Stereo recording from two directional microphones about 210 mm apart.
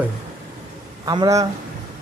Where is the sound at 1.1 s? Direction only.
15° right (ahead or behind).